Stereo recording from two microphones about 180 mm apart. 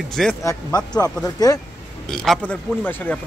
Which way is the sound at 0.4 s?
15° left (ahead or behind).